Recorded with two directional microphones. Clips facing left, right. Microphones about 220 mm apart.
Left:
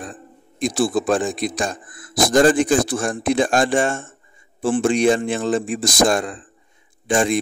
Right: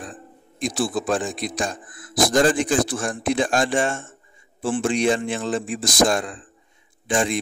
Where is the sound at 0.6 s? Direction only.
50° left (ahead or behind).